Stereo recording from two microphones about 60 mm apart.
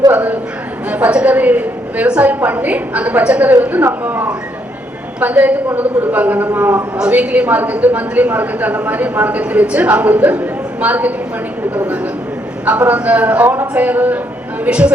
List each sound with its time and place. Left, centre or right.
0.9 s a woman's voice: right
12.9 s a woman's voice: right